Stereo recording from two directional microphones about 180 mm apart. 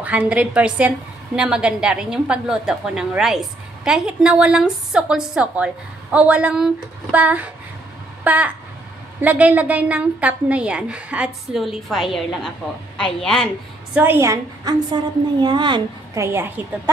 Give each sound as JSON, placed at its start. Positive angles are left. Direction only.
{"t": 0.0, "sound": "a woman's voice", "side_deg": -5}
{"t": 8.2, "sound": "a sound", "side_deg": -10}
{"t": 9.2, "sound": "a woman's voice", "side_deg": -10}
{"t": 13.9, "sound": "a woman's voice", "side_deg": -10}
{"t": 16.3, "sound": "a woman's voice", "side_deg": -10}